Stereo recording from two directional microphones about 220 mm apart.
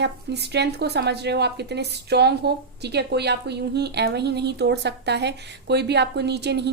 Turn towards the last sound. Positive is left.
turn(degrees=-50)  # may be behind; listen again after turning